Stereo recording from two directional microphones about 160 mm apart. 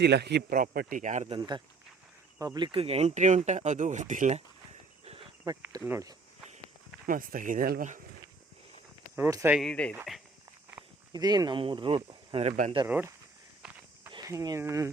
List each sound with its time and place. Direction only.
0.0 s speech: 90° right; by 1.3 s 50° right (ahead or behind)
1.4 s speech: 25° right (ahead or behind); by 4.4 s 45° right (ahead or behind)
5.5 s speech: 25° right (ahead or behind)
7.1 s speech: 60° right (ahead or behind)
9.1 s speech: 15° right (ahead or behind)
9.6 s speech: 5° left (ahead or behind)
11.1 s speech: 25° right (ahead or behind)
12.9 s speech: 15° right (ahead or behind)
13.6 s walk: 5° right (ahead or behind)
14.3 s speech: 20° right (ahead or behind)